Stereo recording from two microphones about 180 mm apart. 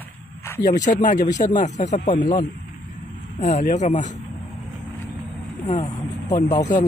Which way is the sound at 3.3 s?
40° left (ahead or behind).